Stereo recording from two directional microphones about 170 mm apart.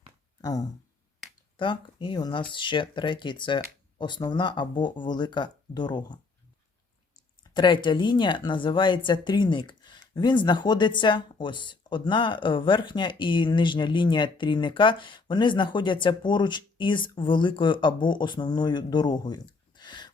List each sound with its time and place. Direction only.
1.5 s speech: 30° left (ahead or behind)
7.5 s speech: 25° left (ahead or behind)